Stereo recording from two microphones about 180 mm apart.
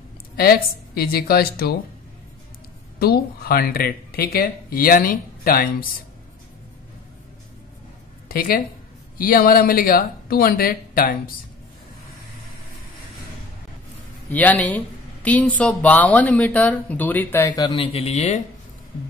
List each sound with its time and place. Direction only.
0.4 s speech: 55° left (ahead or behind)
3.0 s speech: 60° left (ahead or behind)
8.3 s speech: 55° left (ahead or behind)
14.3 s speech: 10° left (ahead or behind)
17.5 s speech: 20° left (ahead or behind)
17.9 s speech: 35° left (ahead or behind)